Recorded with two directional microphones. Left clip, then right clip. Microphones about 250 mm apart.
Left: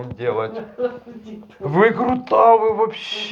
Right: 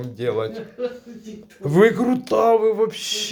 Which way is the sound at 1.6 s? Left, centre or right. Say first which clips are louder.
Even; right.